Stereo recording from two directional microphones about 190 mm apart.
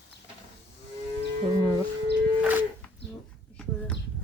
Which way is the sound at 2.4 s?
10° right (ahead or behind).